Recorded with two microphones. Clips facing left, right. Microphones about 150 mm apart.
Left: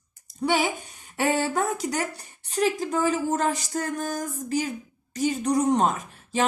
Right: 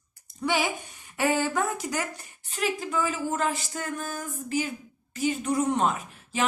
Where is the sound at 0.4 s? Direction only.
30° left (ahead or behind).